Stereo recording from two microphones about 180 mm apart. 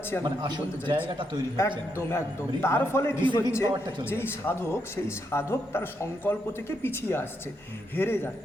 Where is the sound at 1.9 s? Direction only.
15° left (ahead or behind).